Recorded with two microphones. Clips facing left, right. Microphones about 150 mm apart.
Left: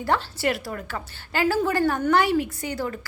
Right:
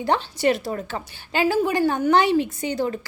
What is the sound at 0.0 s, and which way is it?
A woman's voice, 20° right (ahead or behind).